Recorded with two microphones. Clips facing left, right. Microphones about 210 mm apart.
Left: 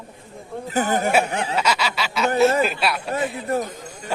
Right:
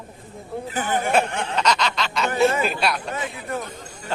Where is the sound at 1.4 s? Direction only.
5° left (ahead or behind).